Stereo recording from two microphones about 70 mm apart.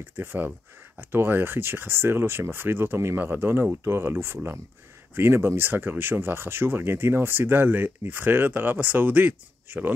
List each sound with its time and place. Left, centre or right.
0.0 s speech: right